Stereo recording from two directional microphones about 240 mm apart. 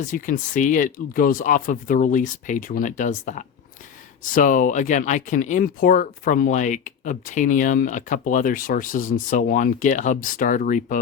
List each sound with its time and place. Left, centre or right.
0.0 s speech: left